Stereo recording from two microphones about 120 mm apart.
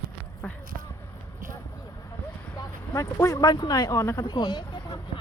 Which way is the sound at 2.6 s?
25° left (ahead or behind).